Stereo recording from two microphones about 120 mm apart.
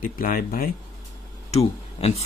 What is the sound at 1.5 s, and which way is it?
Speech, 60° left (ahead or behind).